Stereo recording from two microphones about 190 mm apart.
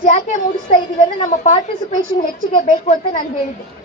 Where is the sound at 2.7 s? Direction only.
40° left (ahead or behind).